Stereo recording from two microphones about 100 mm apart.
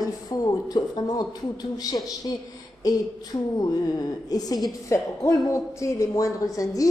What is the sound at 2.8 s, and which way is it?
Speech, 40° left (ahead or behind).